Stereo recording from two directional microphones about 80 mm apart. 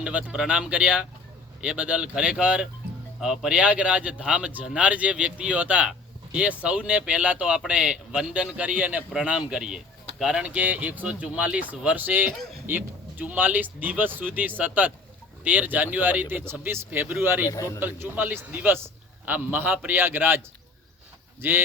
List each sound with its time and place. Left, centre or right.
0.0 s a man's voice: centre
17.4 s a man's voice: left
17.7 s a man's voice: right
21.4 s a man's voice: right